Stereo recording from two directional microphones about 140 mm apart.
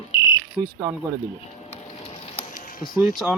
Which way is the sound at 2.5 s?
75° left (ahead or behind).